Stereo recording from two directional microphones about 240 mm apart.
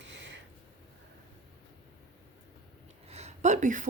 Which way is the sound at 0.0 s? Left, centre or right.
Right.